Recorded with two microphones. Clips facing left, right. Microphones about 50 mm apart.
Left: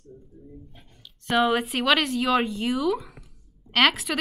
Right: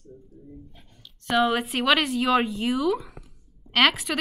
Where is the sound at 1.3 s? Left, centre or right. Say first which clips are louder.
Even; centre.